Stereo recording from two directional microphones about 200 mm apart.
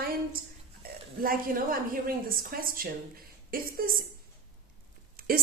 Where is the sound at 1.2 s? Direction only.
45° right (ahead or behind).